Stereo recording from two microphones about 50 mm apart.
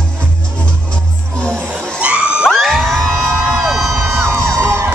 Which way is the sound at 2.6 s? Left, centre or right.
Centre.